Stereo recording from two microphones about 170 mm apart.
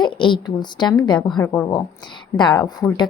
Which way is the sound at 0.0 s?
25° left (ahead or behind).